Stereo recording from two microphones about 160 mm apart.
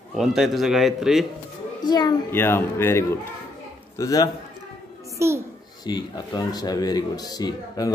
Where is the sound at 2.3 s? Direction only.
15° left (ahead or behind).